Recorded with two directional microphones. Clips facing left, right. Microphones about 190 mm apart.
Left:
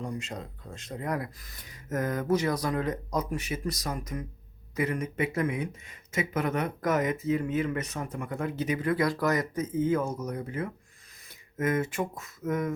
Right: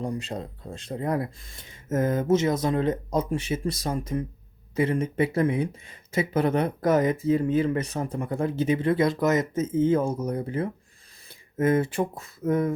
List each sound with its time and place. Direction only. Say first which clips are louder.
0.0 s speech: right 5 dB; 35° right (ahead or behind)